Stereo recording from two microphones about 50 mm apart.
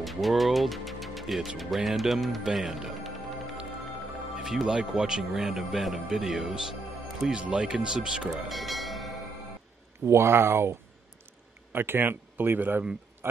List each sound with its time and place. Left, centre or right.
0.0 s speech: centre
4.4 s speech: centre
7.4 s speech: centre
8.5 s vehicle: centre
10.0 s speech: right
11.7 s speech: right